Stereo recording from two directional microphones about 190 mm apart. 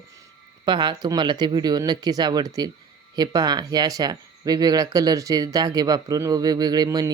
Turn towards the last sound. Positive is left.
turn(degrees=-20)  # may be behind; listen again after turning